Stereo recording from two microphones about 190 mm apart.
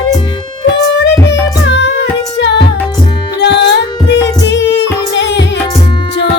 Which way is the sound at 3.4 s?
65° left (ahead or behind).